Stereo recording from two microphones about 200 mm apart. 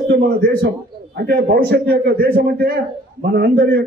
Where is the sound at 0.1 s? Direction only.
50° right (ahead or behind).